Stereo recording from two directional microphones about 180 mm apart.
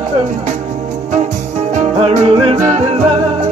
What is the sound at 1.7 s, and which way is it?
Music, 40° right (ahead or behind).